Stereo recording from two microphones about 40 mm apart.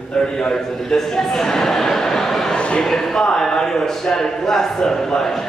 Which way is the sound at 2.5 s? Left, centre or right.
Left.